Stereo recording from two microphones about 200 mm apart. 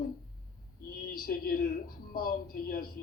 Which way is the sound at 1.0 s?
45° left (ahead or behind).